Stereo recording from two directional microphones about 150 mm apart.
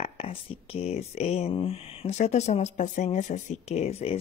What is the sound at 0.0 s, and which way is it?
Speech, 40° left (ahead or behind).